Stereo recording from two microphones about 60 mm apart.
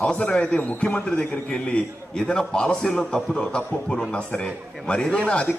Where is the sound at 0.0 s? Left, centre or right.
Centre.